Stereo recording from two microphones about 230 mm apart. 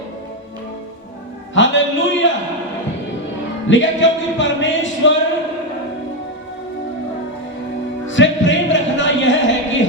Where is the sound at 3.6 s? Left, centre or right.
Left.